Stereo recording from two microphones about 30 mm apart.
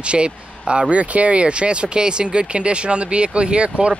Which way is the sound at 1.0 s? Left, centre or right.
Right.